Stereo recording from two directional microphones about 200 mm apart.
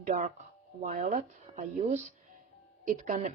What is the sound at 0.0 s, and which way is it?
Speech, 40° right (ahead or behind).